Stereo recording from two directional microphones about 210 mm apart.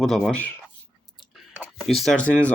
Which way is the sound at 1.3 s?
Centre (ahead or behind).